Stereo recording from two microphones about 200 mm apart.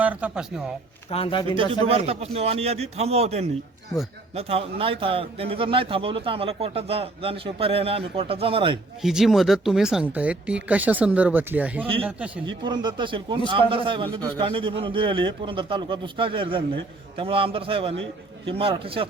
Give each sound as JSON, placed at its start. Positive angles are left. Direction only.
{"t": 0.0, "sound": "speech", "side_deg": -5}
{"t": 1.1, "sound": "speech", "side_deg": 25}
{"t": 1.8, "sound": "a man's voice", "side_deg": -30}
{"t": 9.0, "sound": "speech", "side_deg": 0}
{"t": 12.6, "sound": "a man's voice", "side_deg": -20}
{"t": 17.9, "sound": "a man's voice", "side_deg": -70}
{"t": 18.5, "sound": "a man's voice", "side_deg": -25}